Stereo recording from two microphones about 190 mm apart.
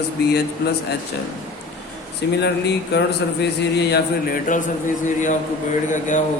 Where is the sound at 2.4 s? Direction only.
60° left (ahead or behind).